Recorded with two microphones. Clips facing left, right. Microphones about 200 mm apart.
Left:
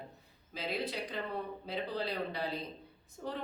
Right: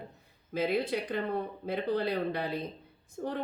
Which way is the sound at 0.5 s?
55° right (ahead or behind).